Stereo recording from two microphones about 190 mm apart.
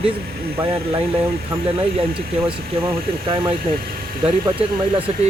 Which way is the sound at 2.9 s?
30° right (ahead or behind).